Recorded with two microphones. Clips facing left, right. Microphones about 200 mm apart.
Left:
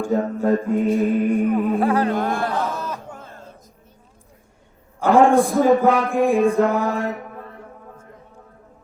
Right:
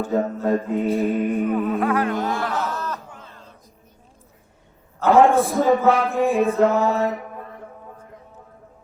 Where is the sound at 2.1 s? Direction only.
50° left (ahead or behind).